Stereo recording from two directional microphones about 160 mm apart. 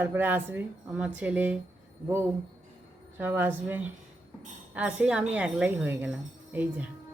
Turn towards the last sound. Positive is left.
turn(degrees=-10)  # may be behind; listen again after turning